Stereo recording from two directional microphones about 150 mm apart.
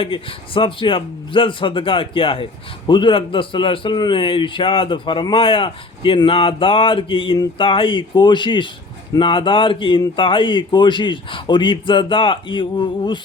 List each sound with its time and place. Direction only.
0.0 s speech: 35° left (ahead or behind)